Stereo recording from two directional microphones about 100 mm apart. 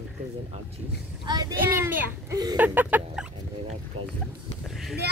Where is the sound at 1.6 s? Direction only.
20° right (ahead or behind).